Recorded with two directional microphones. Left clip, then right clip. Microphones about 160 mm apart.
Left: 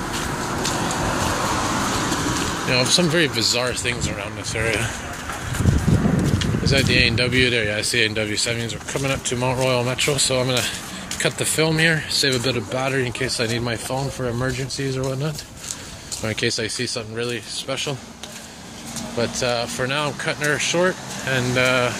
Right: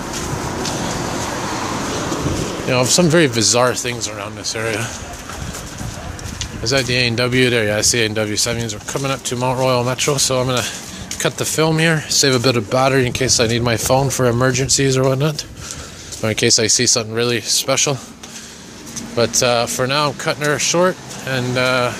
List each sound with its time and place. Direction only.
2.7 s speech: 35° right (ahead or behind)
3.9 s speech: 20° right (ahead or behind)
6.7 s speech: 35° right (ahead or behind); by 17.9 s 50° right (ahead or behind)
19.1 s speech: 45° right (ahead or behind); by 21.9 s 20° right (ahead or behind)